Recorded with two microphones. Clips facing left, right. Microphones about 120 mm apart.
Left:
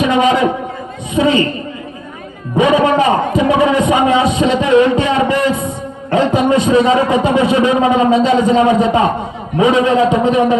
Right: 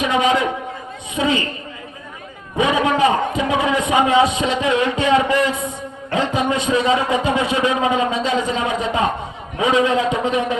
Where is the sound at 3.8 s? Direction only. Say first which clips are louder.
Left 3 dB; 40° left (ahead or behind).